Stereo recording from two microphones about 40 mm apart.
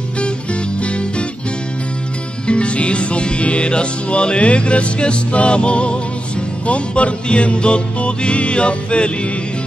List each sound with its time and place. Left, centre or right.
2.4 s music: left